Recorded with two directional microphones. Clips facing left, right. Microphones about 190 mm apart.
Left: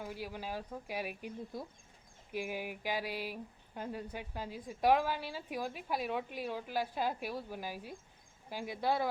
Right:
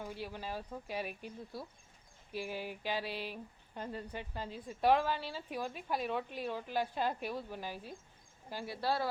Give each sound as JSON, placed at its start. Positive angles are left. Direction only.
{"t": 0.0, "sound": "speech", "side_deg": 10}